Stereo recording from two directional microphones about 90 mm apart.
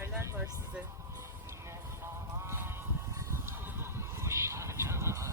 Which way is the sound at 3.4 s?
25° right (ahead or behind).